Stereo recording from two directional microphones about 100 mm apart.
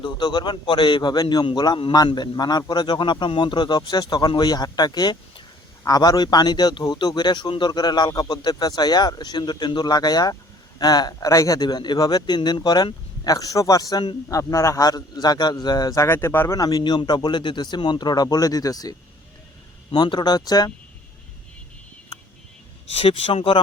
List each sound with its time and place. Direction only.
0.0 s a man's voice: 50° left (ahead or behind)
16.0 s speech: 25° left (ahead or behind)
16.6 s a man's voice: 40° left (ahead or behind)
19.9 s a man's voice: 50° left (ahead or behind)
23.0 s speech: 70° left (ahead or behind)